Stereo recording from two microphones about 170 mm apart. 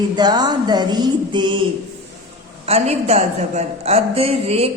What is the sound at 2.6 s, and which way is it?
A woman's voice, 35° right (ahead or behind).